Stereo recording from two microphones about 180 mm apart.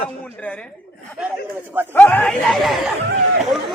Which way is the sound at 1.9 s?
10° left (ahead or behind).